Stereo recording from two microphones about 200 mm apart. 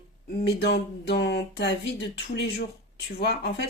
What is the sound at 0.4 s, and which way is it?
Speech, 55° left (ahead or behind).